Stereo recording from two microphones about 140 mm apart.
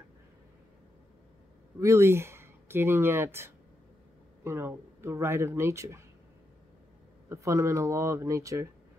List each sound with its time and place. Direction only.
1.8 s speech: 20° right (ahead or behind)
7.2 s speech: 20° right (ahead or behind)